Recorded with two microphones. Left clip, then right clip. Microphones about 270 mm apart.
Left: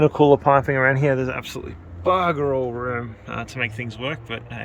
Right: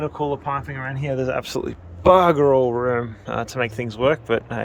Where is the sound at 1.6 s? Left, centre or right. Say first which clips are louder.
Right 6 dB; right.